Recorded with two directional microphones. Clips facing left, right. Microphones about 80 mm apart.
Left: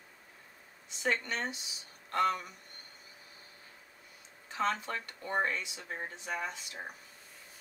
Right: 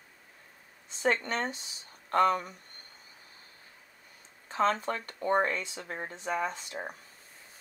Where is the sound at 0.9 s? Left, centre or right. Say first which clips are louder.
Right 4 dB; right.